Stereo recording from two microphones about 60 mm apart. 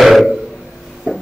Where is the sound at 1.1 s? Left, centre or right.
Centre.